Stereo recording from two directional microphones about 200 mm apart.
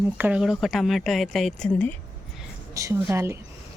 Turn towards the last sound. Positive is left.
turn(degrees=-15)  # may be behind; listen again after turning